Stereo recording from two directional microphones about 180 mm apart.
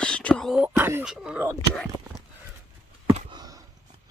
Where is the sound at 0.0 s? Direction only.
5° left (ahead or behind).